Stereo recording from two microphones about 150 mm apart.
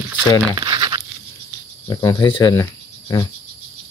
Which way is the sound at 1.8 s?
30° left (ahead or behind).